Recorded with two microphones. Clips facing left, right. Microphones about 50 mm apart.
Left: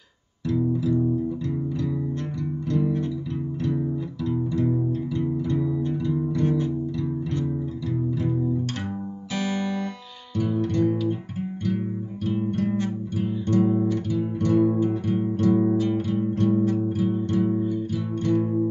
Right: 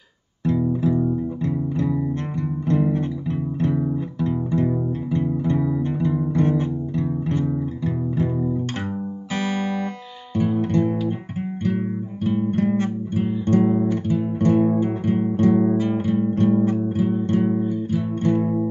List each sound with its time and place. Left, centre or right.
0.5 s music: right
8.2 s music: right
12.3 s music: right
13.2 s guitar: right
17.3 s music: right